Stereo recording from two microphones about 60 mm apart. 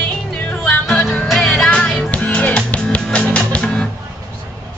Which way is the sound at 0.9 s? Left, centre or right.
Centre.